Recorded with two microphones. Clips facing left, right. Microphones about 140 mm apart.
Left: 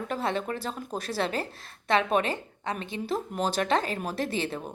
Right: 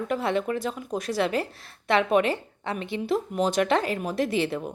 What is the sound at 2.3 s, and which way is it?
A woman's voice, 20° left (ahead or behind).